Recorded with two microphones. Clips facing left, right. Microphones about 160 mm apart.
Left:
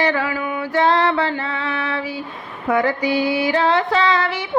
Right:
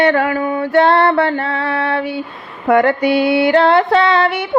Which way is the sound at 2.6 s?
65° right (ahead or behind).